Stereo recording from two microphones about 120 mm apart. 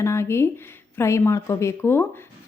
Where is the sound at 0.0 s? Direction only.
20° left (ahead or behind).